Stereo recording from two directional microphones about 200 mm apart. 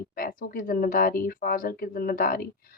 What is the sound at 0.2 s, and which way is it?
Speech, 45° left (ahead or behind).